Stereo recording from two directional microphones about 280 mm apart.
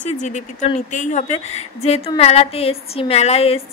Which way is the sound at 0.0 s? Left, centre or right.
Left.